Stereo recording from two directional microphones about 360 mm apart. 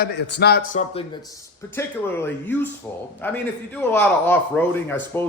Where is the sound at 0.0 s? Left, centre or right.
Left.